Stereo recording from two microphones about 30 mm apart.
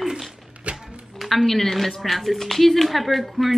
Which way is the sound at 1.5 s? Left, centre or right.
Centre.